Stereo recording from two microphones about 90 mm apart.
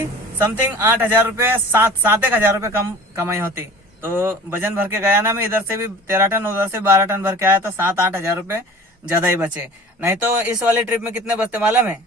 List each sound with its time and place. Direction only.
0.3 s a man's voice: 25° right (ahead or behind)